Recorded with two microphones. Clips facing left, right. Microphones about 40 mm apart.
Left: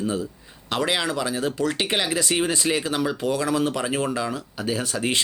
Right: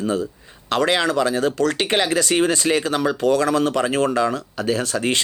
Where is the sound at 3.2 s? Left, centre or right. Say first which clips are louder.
Right 7 dB; right.